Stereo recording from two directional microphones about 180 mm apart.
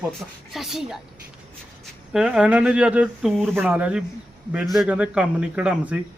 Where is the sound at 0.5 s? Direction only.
Centre (ahead or behind).